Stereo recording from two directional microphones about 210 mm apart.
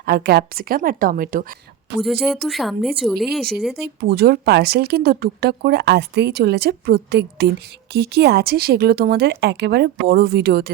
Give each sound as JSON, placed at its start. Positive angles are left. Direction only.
{"t": 0.0, "sound": "speech", "side_deg": -45}
{"t": 2.0, "sound": "speech", "side_deg": 0}
{"t": 3.8, "sound": "speech", "side_deg": -50}